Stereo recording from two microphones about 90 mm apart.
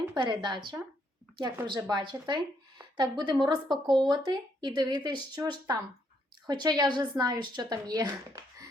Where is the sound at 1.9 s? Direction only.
55° right (ahead or behind).